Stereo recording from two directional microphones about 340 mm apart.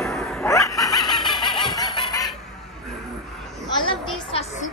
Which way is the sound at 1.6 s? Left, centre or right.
Centre.